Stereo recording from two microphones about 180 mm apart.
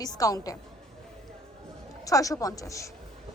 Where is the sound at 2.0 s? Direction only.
20° left (ahead or behind).